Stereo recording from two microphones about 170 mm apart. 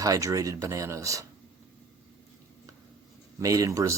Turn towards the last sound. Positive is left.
turn(degrees=-20)  # may be behind; listen again after turning